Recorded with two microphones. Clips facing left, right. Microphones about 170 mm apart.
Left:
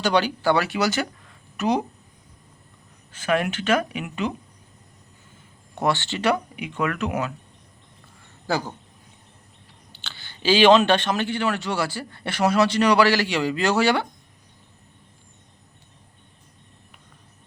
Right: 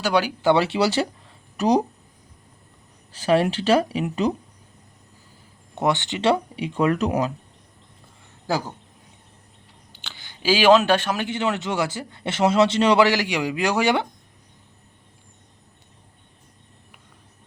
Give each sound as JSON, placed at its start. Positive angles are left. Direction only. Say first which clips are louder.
{"t": 0.0, "sound": "speech", "louder": "even", "side_deg": -10}
{"t": 0.4, "sound": "a man's voice", "louder": "right 3 dB", "side_deg": -25}
{"t": 3.1, "sound": "speech", "louder": "right 4 dB", "side_deg": -35}
{"t": 5.7, "sound": "speech", "louder": "right 1 dB", "side_deg": -20}
{"t": 6.3, "sound": "speech", "louder": "right 3 dB", "side_deg": -35}
{"t": 8.4, "sound": "speech", "louder": "even", "side_deg": -10}
{"t": 9.9, "sound": "speech", "louder": "even", "side_deg": -15}
{"t": 11.3, "sound": "a man's voice", "louder": "even", "side_deg": -20}